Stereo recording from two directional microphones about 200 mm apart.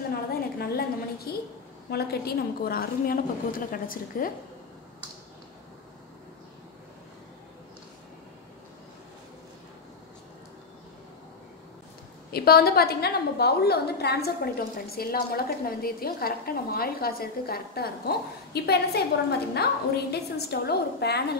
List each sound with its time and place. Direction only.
0.6 s a sound: 50° left (ahead or behind)
1.9 s a woman's voice: 50° left (ahead or behind)
12.3 s a woman's voice: 50° left (ahead or behind)